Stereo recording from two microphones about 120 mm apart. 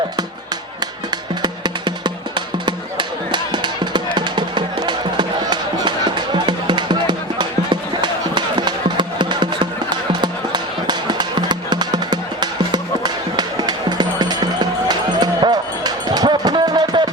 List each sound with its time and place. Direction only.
1.1 s music: 35° right (ahead or behind)